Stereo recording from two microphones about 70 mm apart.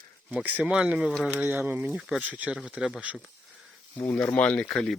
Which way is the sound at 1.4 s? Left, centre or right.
Right.